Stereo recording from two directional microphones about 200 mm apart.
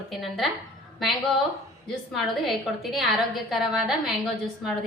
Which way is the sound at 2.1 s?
Centre (ahead or behind).